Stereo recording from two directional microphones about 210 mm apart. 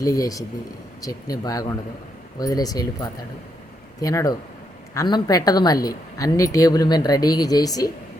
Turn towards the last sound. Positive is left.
turn(degrees=15)  # may be behind; listen again after turning